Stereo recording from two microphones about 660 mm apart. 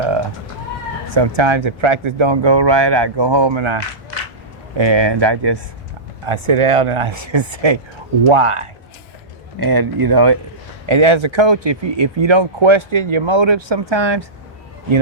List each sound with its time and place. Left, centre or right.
1.1 s speech: right
4.8 s speech: right
9.6 s speech: right
10.8 s speech: right